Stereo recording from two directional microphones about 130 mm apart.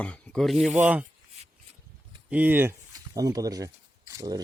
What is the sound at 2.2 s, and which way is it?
Speech, 10° right (ahead or behind).